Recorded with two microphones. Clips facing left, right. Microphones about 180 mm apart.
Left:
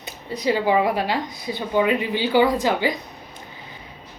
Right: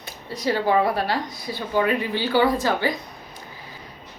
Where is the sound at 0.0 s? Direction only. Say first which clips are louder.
Left 2 dB; 15° left (ahead or behind).